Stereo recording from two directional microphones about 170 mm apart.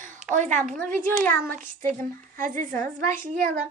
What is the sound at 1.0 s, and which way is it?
Speech, 15° left (ahead or behind).